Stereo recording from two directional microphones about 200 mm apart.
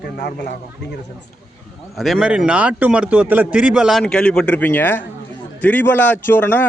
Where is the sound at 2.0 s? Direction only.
Centre (ahead or behind).